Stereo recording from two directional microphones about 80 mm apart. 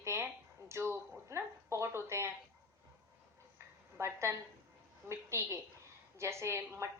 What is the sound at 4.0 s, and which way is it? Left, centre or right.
A woman's voice, right.